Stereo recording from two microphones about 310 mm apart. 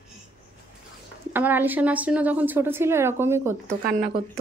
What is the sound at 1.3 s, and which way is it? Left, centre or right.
Speech, centre.